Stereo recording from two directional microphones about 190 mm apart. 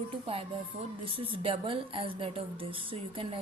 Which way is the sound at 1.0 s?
30° right (ahead or behind).